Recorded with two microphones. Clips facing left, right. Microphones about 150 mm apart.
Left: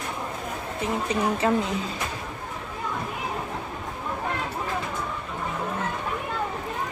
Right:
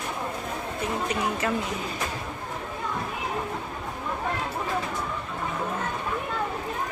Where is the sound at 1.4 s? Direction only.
25° left (ahead or behind).